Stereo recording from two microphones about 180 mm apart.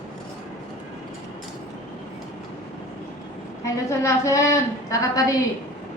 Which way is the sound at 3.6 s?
15° left (ahead or behind).